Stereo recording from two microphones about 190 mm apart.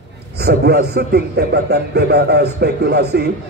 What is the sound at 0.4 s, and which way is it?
A man's voice, 55° right (ahead or behind).